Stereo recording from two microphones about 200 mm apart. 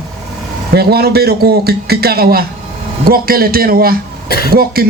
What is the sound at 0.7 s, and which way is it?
A man's voice, 50° right (ahead or behind).